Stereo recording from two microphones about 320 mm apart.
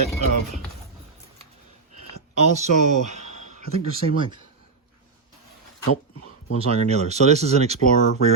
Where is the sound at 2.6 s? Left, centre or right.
Right.